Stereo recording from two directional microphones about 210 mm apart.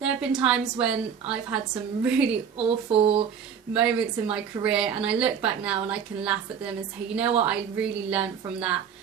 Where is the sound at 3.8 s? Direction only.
5° right (ahead or behind).